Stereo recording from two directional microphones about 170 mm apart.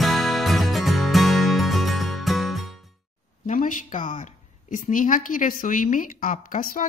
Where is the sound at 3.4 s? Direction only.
50° left (ahead or behind).